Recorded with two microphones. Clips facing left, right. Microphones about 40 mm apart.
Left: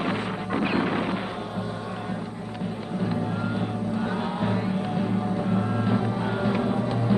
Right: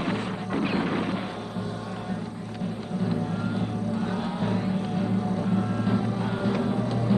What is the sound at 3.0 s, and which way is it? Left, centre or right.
Music, centre.